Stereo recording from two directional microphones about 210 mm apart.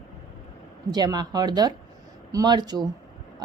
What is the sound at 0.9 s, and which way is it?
Speech, 20° right (ahead or behind).